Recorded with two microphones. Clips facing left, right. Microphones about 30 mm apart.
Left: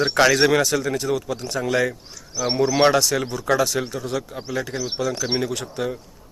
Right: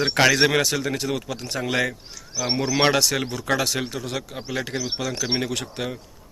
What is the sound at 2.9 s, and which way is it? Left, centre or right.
Speech, right.